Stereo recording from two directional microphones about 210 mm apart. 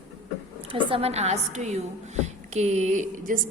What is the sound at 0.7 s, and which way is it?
A woman's voice, 25° right (ahead or behind).